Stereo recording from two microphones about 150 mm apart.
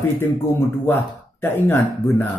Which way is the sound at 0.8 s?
15° left (ahead or behind).